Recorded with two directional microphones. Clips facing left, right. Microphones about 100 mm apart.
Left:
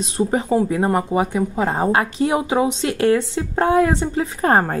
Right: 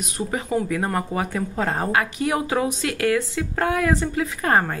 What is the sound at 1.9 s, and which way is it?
Speech, 30° left (ahead or behind).